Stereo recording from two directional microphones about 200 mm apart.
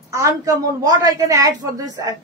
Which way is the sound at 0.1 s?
15° right (ahead or behind).